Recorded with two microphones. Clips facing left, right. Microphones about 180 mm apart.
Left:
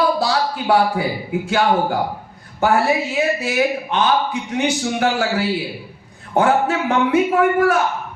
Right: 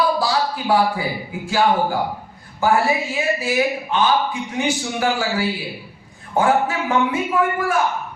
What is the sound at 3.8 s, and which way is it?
A man's voice, 65° left (ahead or behind).